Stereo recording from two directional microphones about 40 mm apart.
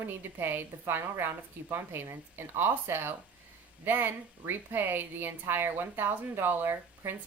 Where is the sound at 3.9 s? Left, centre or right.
Right.